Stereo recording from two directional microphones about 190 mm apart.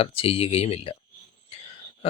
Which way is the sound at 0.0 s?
30° left (ahead or behind).